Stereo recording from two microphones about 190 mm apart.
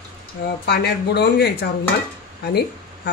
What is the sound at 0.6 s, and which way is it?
Speech, 60° left (ahead or behind).